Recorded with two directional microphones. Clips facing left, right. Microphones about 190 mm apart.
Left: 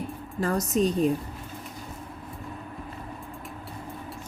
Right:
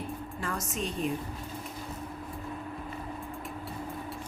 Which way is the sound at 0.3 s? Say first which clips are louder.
Left 12 dB; 40° left (ahead or behind).